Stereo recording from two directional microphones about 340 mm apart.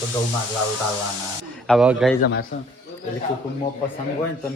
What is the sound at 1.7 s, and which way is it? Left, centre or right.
Speech, centre.